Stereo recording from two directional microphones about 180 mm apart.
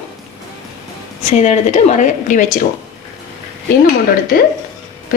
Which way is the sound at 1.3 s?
40° left (ahead or behind).